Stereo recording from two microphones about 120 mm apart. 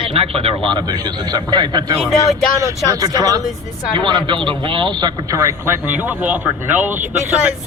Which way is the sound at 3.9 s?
40° right (ahead or behind).